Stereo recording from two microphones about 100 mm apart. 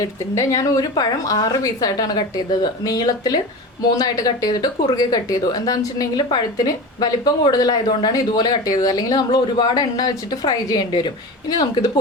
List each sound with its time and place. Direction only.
0.0 s a woman's voice: 35° left (ahead or behind)